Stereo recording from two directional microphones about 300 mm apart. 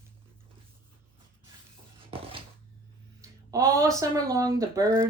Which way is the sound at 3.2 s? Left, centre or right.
Centre.